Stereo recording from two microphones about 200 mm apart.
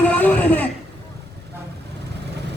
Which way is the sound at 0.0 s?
5° left (ahead or behind).